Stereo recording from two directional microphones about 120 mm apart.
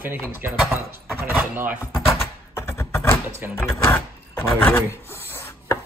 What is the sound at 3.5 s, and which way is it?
Speech, 20° left (ahead or behind).